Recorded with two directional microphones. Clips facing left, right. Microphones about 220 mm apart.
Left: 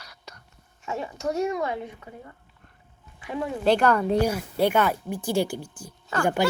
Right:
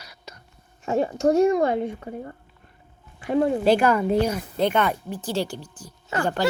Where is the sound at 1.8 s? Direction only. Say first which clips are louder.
Right 10 dB; 45° right (ahead or behind).